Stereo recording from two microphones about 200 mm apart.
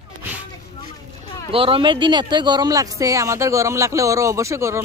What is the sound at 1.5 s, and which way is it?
Speech, 25° right (ahead or behind).